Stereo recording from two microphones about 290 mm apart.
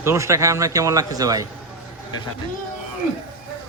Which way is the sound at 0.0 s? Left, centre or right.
Centre.